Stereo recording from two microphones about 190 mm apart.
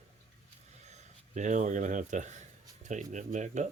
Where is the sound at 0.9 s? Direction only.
40° right (ahead or behind).